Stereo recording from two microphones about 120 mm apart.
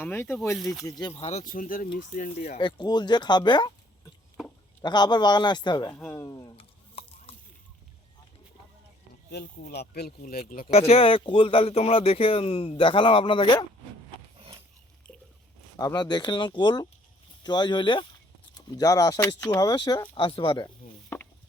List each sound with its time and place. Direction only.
0.0 s speech: 20° left (ahead or behind)
0.5 s speech: centre (ahead or behind)
0.9 s speech: 35° left (ahead or behind)
1.1 s speech: 60° left (ahead or behind); by 2.6 s 80° left
2.6 s speech: 40° left (ahead or behind)
4.8 s speech: 35° left (ahead or behind)
6.6 s a sound: 55° left (ahead or behind)
10.4 s speech: 60° left (ahead or behind); by 13.7 s 40° left (ahead or behind)
15.8 s speech: 35° left (ahead or behind)
21.1 s a sound: 20° left (ahead or behind)